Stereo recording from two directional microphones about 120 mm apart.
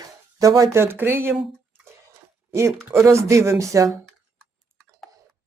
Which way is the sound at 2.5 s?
25° right (ahead or behind).